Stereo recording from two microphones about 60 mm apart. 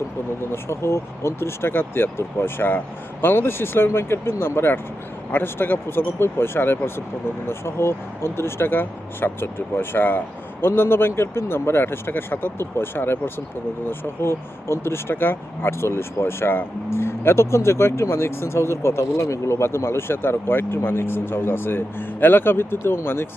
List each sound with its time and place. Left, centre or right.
0.5 s speech: left